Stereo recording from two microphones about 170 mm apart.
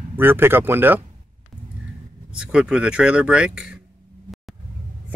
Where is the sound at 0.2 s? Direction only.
10° right (ahead or behind).